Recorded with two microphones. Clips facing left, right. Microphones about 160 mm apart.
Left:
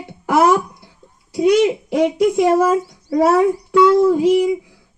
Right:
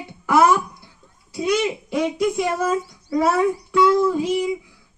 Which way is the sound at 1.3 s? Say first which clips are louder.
Left 8 dB; 80° left.